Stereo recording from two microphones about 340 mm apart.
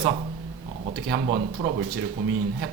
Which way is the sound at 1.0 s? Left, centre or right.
Right.